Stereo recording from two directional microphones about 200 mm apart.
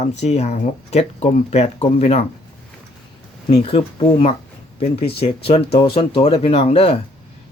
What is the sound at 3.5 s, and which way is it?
Speech, 30° left (ahead or behind).